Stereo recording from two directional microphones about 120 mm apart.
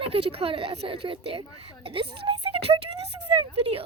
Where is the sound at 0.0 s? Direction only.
50° right (ahead or behind).